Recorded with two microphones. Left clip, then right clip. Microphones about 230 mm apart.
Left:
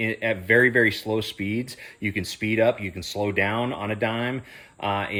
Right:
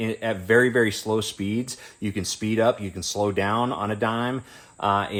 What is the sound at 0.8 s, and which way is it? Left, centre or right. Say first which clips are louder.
Speech: left 1 dB; centre.